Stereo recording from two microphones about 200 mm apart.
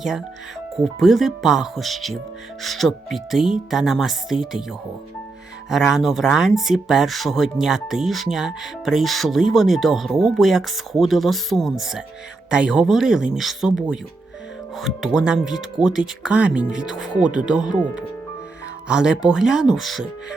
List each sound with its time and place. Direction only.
0.8 s speech: centre (ahead or behind)
5.7 s speech: centre (ahead or behind)